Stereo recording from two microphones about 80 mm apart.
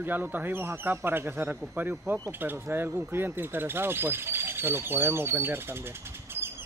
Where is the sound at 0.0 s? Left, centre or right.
Right.